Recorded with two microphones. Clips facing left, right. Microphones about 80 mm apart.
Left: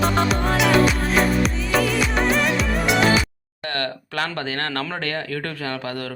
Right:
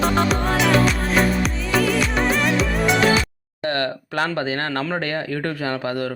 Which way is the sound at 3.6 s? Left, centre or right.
Centre.